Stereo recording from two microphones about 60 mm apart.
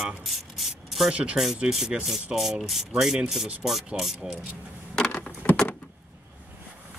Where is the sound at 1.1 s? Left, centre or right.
Right.